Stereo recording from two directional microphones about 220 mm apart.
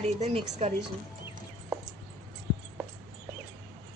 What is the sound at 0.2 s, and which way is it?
Speech, 30° right (ahead or behind).